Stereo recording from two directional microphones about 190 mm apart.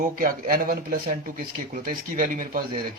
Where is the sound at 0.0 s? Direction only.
45° right (ahead or behind).